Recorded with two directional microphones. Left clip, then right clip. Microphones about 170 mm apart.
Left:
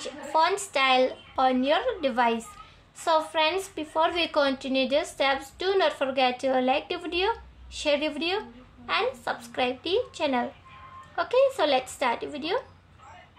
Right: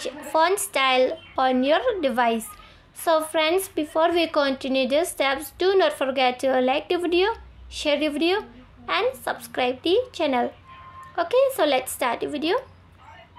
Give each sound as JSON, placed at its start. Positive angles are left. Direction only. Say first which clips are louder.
{"t": 0.0, "sound": "a woman's voice", "louder": "right 3 dB", "side_deg": -35}